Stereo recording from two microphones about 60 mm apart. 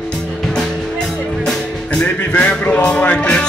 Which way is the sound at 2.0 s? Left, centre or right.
Centre.